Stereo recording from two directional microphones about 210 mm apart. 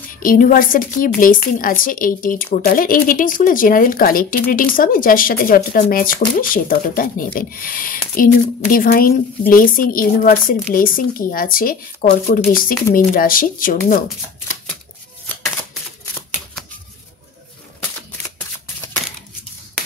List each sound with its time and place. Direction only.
0.2 s a woman's voice: 40° left (ahead or behind)
15.2 s shuffling cards: 5° left (ahead or behind)